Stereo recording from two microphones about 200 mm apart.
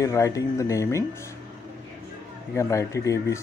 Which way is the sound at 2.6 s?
15° left (ahead or behind).